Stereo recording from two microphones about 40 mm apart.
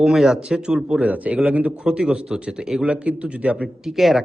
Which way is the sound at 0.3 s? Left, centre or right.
Centre.